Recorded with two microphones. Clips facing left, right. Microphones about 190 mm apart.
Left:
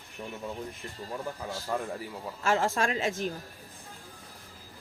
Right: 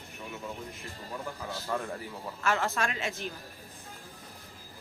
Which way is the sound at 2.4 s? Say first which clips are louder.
Left 3 dB; 30° left (ahead or behind).